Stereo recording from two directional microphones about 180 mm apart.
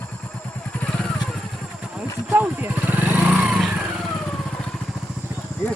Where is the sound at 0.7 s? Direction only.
5° left (ahead or behind).